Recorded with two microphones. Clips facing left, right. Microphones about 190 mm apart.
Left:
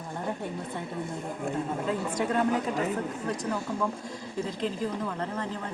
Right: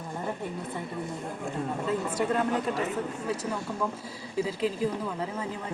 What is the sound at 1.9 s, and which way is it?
Speech, centre (ahead or behind).